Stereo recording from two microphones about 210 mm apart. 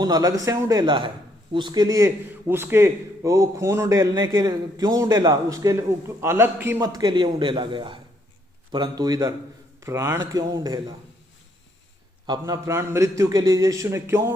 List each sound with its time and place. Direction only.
0.0 s a man's voice: 15° right (ahead or behind)
12.2 s a man's voice: 20° right (ahead or behind)